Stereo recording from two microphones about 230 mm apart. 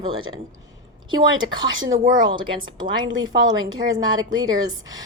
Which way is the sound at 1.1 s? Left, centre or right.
Right.